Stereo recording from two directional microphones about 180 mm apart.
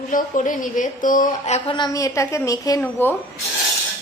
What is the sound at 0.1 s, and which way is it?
A woman's voice, 45° left (ahead or behind).